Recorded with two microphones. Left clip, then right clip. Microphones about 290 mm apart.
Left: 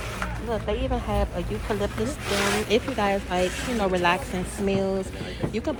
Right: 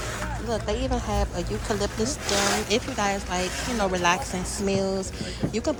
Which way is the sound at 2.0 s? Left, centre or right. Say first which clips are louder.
Right 2 dB; right.